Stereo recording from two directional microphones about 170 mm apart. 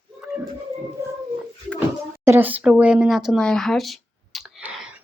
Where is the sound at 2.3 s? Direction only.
10° right (ahead or behind).